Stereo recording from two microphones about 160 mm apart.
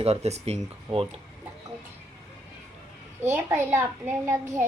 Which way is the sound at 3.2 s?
15° right (ahead or behind).